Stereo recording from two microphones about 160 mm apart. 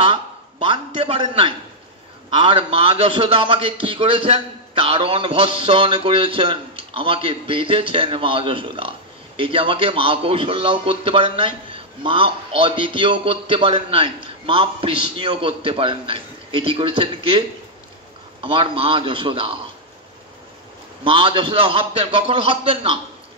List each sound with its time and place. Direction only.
0.0 s a man's voice: 35° right (ahead or behind)
18.4 s a man's voice: 35° right (ahead or behind)
21.0 s a man's voice: 30° right (ahead or behind)